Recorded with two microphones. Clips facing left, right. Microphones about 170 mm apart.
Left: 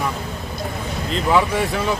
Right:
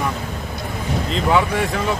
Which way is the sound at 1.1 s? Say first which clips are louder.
Left 1 dB; centre (ahead or behind).